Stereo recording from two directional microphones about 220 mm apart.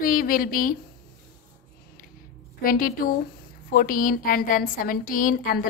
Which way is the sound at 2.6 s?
40° left (ahead or behind).